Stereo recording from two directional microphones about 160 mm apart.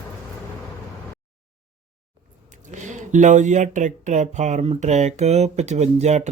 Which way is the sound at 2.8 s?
50° right (ahead or behind).